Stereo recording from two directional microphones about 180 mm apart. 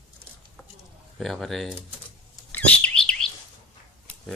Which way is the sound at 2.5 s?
5° left (ahead or behind).